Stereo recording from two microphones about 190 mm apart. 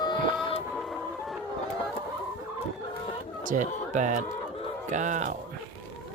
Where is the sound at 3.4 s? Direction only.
40° right (ahead or behind).